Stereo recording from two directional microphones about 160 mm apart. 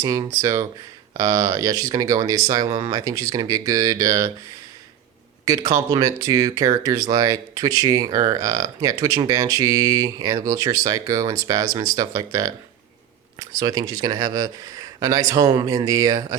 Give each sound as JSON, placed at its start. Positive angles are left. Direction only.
{"t": 0.0, "sound": "speech", "side_deg": -25}
{"t": 5.5, "sound": "speech", "side_deg": -20}